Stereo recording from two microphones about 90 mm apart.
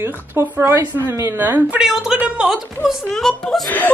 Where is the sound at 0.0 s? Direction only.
25° right (ahead or behind).